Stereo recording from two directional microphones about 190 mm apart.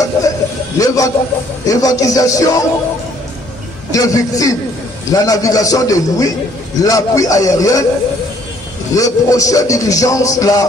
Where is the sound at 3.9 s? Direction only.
20° left (ahead or behind).